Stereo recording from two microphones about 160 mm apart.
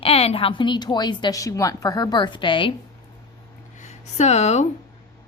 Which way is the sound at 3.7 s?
45° left (ahead or behind).